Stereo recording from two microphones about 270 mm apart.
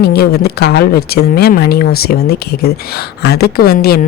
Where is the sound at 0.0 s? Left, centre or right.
Left.